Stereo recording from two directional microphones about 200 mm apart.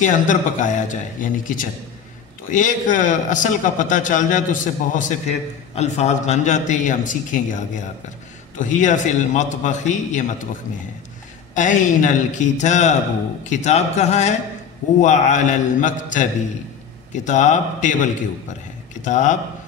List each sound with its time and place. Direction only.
0.0 s a man's voice: 40° left (ahead or behind)
11.5 s a man's voice: 40° left (ahead or behind)